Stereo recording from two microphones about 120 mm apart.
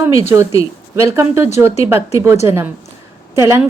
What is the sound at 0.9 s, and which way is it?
A woman's voice, 20° right (ahead or behind).